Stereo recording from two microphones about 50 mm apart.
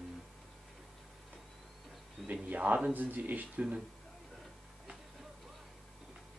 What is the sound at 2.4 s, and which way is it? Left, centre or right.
Speech, right.